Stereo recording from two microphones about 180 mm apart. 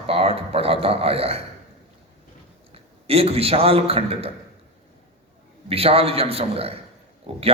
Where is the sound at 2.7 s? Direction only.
35° right (ahead or behind).